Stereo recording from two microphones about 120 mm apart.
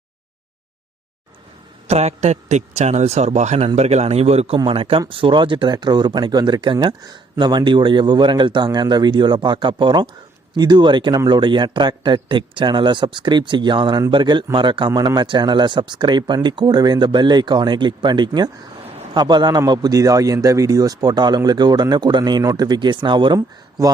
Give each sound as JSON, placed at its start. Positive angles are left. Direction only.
{"t": 1.9, "sound": "a man's voice", "side_deg": -65}